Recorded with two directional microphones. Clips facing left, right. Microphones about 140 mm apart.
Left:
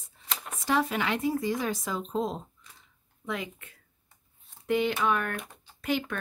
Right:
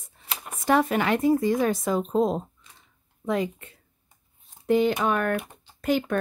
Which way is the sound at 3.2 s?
40° right (ahead or behind).